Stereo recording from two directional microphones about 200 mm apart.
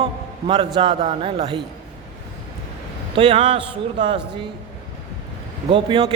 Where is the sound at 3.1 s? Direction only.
25° right (ahead or behind).